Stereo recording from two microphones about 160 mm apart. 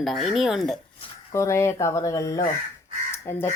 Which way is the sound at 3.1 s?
15° left (ahead or behind).